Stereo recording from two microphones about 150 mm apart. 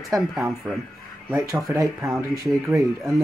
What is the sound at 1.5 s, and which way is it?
Speech, 25° right (ahead or behind).